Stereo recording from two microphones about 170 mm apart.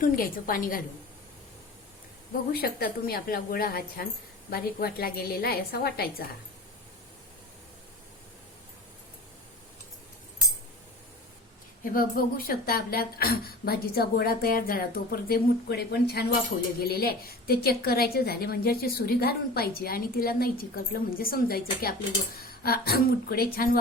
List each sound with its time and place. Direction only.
0.0 s a woman's voice: 55° left (ahead or behind)
2.5 s a woman's voice: 65° left (ahead or behind)
11.9 s a woman's voice: 60° left (ahead or behind)